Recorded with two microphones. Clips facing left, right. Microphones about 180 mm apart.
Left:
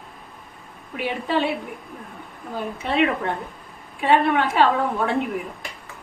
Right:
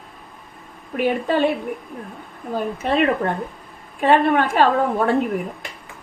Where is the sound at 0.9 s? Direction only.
50° right (ahead or behind).